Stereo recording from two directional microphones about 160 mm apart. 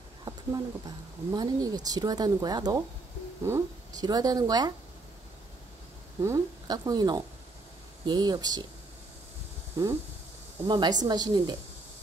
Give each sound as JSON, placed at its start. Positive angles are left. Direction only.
{"t": 0.2, "sound": "speech", "side_deg": -25}
{"t": 6.2, "sound": "speech", "side_deg": -20}
{"t": 9.8, "sound": "speech", "side_deg": -20}